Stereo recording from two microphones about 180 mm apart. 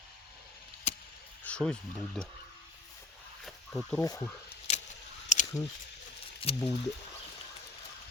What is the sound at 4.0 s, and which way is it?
Speech, 20° left (ahead or behind).